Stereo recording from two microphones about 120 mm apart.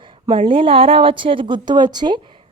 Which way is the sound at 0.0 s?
45° right (ahead or behind).